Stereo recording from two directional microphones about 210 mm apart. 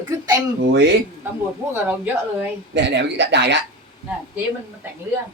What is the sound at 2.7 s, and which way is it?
Speech, 55° right (ahead or behind).